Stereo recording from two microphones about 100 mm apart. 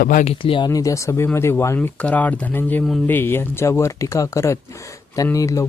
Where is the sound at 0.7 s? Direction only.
35° left (ahead or behind).